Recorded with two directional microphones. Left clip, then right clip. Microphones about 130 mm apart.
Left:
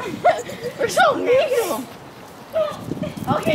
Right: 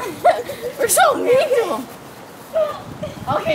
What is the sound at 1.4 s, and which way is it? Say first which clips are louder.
Speech: right 2 dB; 20° right (ahead or behind).